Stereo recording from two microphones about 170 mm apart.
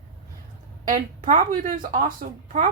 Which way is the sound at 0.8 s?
45° right (ahead or behind).